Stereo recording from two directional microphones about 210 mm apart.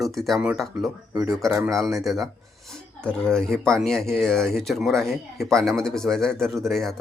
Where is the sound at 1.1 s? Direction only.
15° right (ahead or behind).